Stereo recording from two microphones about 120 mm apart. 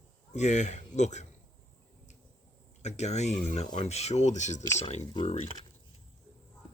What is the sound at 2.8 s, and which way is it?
Speech, 70° left (ahead or behind).